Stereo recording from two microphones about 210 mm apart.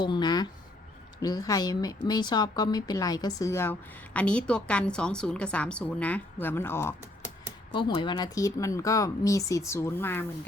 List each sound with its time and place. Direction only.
0.0 s a woman's voice: 20° left (ahead or behind)